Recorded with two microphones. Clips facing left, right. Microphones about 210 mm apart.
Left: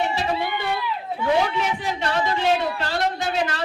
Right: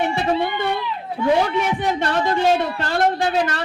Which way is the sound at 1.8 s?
55° right (ahead or behind).